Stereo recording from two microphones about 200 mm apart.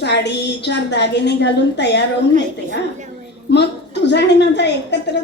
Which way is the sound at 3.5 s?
60° left (ahead or behind).